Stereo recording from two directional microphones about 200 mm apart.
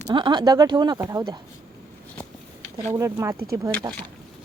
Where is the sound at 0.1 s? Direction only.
20° right (ahead or behind).